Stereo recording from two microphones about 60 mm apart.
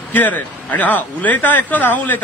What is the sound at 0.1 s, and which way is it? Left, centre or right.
A man's voice, left.